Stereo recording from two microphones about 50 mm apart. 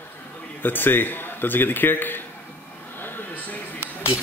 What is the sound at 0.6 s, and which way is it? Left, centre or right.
A man's voice, left.